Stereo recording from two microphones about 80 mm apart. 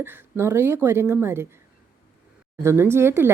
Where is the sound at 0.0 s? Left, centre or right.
Right.